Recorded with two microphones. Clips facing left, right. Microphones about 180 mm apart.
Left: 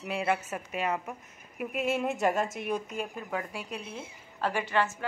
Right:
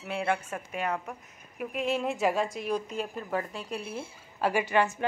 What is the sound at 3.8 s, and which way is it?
Speech, 20° left (ahead or behind).